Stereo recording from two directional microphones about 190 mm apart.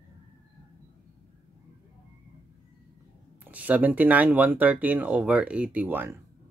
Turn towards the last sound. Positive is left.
turn(degrees=-10)  # may be behind; listen again after turning